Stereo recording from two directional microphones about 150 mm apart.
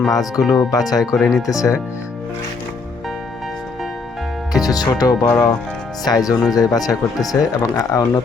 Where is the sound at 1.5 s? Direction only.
20° left (ahead or behind).